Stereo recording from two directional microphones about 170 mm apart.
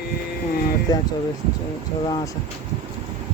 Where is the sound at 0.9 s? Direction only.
25° left (ahead or behind).